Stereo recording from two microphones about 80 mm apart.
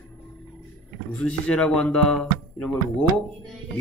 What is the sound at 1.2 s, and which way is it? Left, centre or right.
Speech, centre.